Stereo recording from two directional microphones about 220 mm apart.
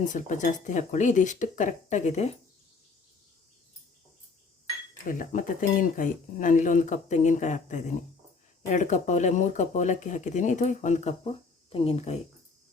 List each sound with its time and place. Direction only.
0.0 s speech: 35° left (ahead or behind)
5.0 s speech: 35° left (ahead or behind)